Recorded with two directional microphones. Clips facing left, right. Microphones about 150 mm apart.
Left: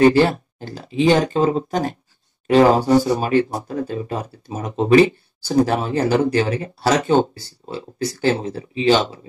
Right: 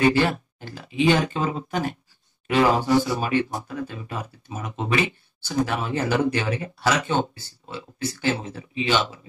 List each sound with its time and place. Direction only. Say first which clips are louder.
0.0 s speech: left 6 dB; 35° left (ahead or behind)